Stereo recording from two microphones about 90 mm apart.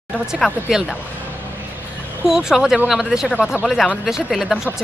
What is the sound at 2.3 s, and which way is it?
Speech, 5° right (ahead or behind).